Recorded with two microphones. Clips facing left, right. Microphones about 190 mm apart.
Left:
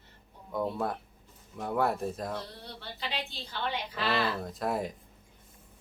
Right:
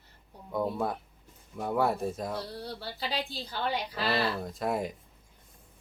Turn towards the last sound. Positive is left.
turn(degrees=0)  # may be behind; listen again after turning